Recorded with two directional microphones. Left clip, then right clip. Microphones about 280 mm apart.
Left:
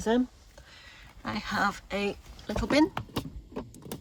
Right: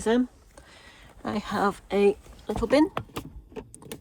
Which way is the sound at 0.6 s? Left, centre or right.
Centre.